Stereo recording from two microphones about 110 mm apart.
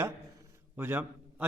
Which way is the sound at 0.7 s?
20° right (ahead or behind).